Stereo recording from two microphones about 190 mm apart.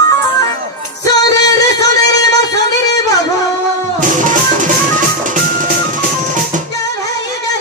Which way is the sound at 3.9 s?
45° right (ahead or behind).